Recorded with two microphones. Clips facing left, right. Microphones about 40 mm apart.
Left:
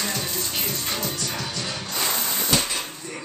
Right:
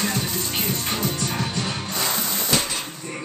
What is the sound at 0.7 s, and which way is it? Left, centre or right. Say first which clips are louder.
Music: right 3 dB; right.